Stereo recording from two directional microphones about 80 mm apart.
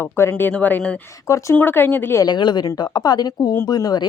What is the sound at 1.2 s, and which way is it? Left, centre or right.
Speech, left.